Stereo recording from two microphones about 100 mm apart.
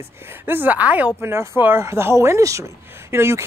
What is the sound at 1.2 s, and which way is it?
Speech, 25° right (ahead or behind).